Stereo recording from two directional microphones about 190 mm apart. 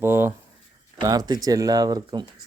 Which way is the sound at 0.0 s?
10° right (ahead or behind).